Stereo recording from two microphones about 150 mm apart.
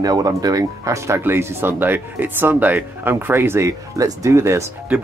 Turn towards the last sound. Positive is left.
turn(degrees=-20)  # may be behind; listen again after turning